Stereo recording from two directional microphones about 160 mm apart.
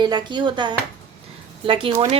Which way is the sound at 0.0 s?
30° right (ahead or behind).